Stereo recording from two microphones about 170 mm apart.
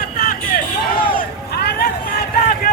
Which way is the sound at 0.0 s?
55° left (ahead or behind).